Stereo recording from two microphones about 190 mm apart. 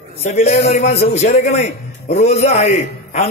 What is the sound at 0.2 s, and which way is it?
A man's voice, 35° left (ahead or behind).